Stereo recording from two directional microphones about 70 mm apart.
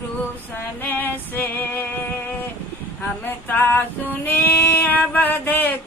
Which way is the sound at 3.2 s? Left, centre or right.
Left.